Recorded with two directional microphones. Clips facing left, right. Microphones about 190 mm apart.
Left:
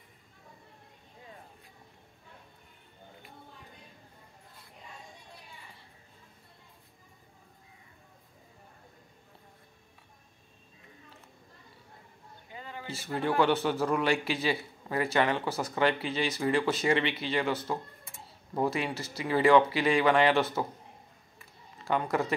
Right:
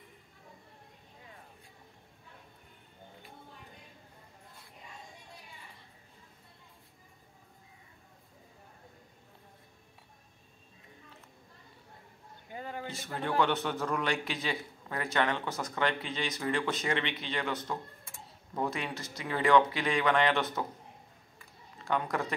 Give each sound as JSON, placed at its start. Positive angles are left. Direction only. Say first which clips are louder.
{"t": 12.5, "sound": "a sound", "louder": "right 4 dB", "side_deg": -45}
{"t": 12.8, "sound": "a man's voice", "louder": "left 7 dB", "side_deg": 5}
{"t": 18.9, "sound": "a man's voice", "louder": "left 6 dB", "side_deg": 5}
{"t": 21.8, "sound": "a man's voice", "louder": "left 3 dB", "side_deg": 5}